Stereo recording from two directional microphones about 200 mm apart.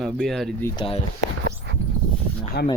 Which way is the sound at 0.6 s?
25° left (ahead or behind).